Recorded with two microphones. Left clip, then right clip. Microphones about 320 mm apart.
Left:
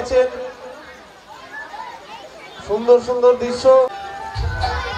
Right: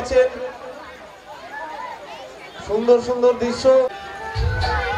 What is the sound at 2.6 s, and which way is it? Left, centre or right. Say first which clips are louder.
A man's voice: left 2 dB; left.